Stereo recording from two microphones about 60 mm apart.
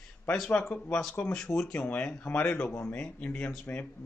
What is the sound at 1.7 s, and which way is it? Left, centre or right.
A man's voice, left.